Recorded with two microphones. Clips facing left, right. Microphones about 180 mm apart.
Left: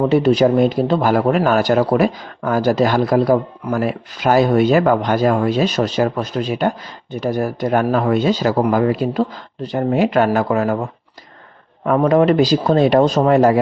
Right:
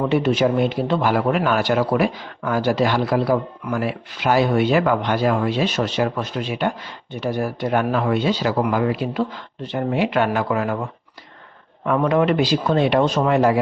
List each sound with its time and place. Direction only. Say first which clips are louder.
0.0 s speech: left 5 dB; 35° left (ahead or behind)
11.9 s speech: left 4 dB; 40° left (ahead or behind)